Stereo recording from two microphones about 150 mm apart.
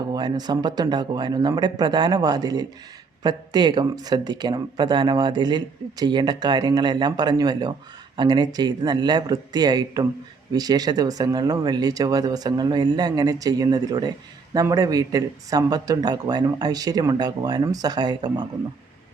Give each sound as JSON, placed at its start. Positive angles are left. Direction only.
{"t": 0.0, "sound": "speech", "side_deg": -30}